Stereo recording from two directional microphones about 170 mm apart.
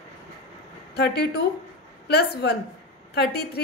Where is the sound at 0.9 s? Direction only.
70° left (ahead or behind).